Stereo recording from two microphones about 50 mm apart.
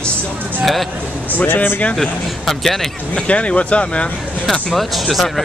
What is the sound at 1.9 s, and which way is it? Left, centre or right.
Speech, centre.